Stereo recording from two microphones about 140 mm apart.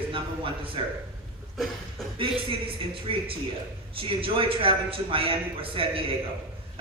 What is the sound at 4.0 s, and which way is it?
A man's voice, 40° right (ahead or behind).